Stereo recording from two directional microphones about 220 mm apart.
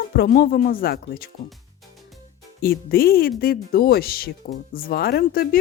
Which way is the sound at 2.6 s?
45° left (ahead or behind).